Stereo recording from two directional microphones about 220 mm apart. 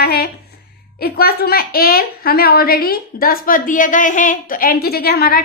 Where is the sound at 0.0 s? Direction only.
45° left (ahead or behind).